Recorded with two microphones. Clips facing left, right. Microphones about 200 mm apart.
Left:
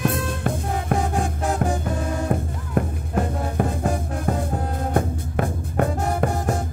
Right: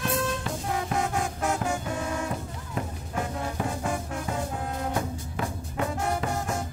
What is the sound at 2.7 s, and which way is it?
Music, 55° left (ahead or behind).